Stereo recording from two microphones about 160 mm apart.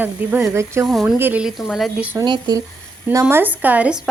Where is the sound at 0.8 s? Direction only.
Centre (ahead or behind).